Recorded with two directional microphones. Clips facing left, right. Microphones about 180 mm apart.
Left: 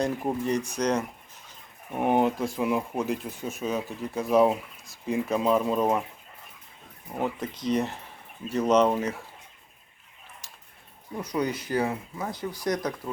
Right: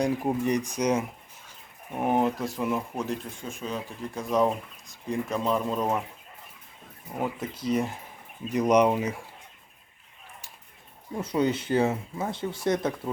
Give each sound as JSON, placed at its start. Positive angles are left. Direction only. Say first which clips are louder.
{"t": 0.0, "sound": "speech", "louder": "right 2 dB", "side_deg": -10}
{"t": 2.0, "sound": "speech", "louder": "left 2 dB", "side_deg": 0}
{"t": 7.2, "sound": "speech", "louder": "left 1 dB", "side_deg": -5}
{"t": 11.2, "sound": "speech", "louder": "right 3 dB", "side_deg": -25}